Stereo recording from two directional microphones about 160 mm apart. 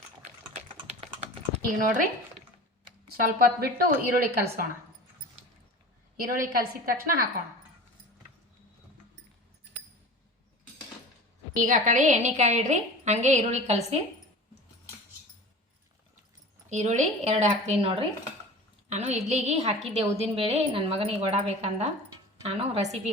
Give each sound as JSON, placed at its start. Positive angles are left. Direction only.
{"t": 0.7, "sound": "typing", "side_deg": -40}
{"t": 1.8, "sound": "a woman's voice", "side_deg": -55}
{"t": 3.2, "sound": "a woman's voice", "side_deg": -60}
{"t": 6.1, "sound": "a woman's voice", "side_deg": -60}
{"t": 11.6, "sound": "a woman's voice", "side_deg": -50}
{"t": 16.6, "sound": "a woman's voice", "side_deg": -50}